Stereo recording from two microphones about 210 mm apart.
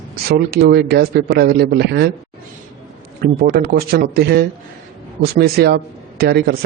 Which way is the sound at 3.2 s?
50° right (ahead or behind).